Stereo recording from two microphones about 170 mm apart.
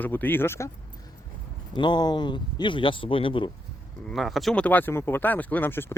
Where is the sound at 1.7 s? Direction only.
25° left (ahead or behind).